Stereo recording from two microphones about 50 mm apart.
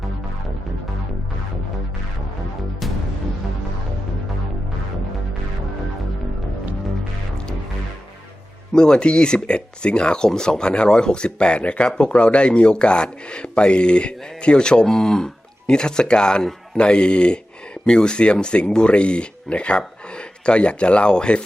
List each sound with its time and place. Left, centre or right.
8.7 s a man's voice: centre